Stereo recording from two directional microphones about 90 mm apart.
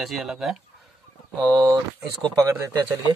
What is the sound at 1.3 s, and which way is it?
Speech, 50° right (ahead or behind).